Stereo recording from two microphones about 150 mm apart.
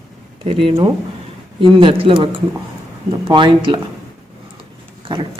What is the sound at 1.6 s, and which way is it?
Speech, 35° right (ahead or behind).